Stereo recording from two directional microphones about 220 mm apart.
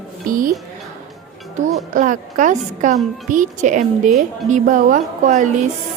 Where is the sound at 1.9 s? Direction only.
35° right (ahead or behind).